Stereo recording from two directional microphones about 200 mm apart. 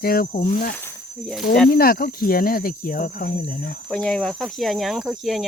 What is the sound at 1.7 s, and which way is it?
Speech, 45° left (ahead or behind).